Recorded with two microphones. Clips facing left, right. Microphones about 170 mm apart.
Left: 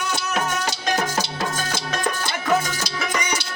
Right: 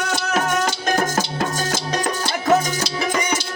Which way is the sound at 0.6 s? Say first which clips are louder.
Right 3 dB; 45° right (ahead or behind).